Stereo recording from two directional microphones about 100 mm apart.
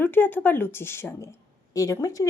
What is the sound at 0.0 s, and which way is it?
Speech, 20° left (ahead or behind).